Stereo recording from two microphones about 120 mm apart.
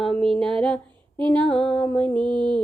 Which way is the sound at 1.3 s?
10° left (ahead or behind).